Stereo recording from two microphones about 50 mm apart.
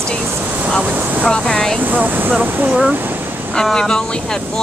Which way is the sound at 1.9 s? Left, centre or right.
Right.